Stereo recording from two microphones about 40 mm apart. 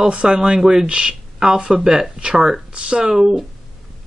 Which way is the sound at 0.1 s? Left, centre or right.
Right.